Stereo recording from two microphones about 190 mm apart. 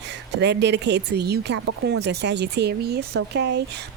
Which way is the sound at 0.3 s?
65° right (ahead or behind).